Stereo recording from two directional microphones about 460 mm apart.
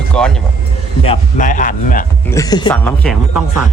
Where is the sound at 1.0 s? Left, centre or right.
Centre.